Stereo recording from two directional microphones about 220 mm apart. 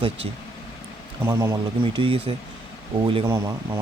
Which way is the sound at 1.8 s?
25° right (ahead or behind).